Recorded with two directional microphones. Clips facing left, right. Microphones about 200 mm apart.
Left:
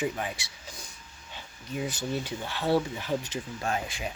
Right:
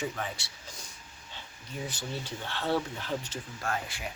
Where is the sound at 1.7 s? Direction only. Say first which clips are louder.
Left 6 dB; 10° left (ahead or behind).